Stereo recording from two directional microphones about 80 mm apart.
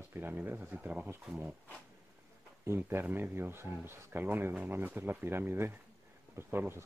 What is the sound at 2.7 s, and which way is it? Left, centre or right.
Speech, right.